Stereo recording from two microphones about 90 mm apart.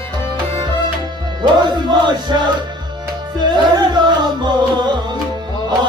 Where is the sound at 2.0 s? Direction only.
55° right (ahead or behind).